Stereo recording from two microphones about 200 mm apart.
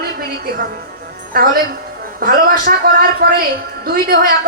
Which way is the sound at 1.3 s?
45° right (ahead or behind).